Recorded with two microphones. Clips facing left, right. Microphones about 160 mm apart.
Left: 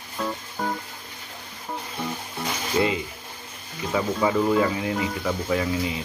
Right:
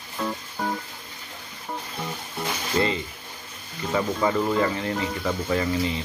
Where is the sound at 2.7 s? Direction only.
5° left (ahead or behind).